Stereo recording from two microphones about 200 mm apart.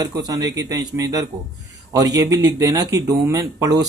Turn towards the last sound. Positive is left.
turn(degrees=-15)  # may be behind; listen again after turning